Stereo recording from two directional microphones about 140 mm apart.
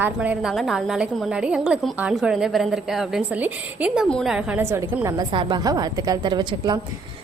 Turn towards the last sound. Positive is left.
turn(degrees=-30)  # may be behind; listen again after turning